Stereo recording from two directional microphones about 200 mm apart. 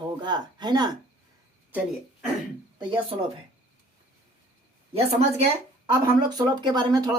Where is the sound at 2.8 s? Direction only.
25° right (ahead or behind).